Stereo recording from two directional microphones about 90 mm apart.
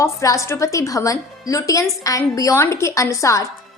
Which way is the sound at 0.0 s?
35° left (ahead or behind).